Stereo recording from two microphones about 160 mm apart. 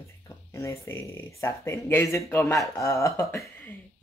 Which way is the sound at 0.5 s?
15° left (ahead or behind).